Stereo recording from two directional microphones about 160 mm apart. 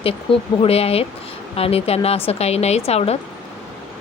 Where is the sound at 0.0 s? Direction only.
35° left (ahead or behind).